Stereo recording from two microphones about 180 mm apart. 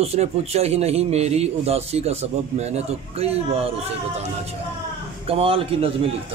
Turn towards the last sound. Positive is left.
turn(degrees=-30)  # may be behind; listen again after turning